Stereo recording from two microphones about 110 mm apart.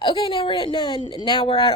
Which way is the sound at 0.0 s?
50° left (ahead or behind).